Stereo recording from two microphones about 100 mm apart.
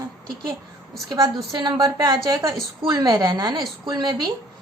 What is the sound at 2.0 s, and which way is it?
A woman's voice, 35° right (ahead or behind).